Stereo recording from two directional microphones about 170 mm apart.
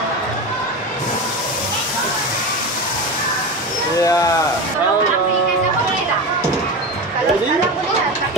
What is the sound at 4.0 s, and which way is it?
Speech, 20° left (ahead or behind).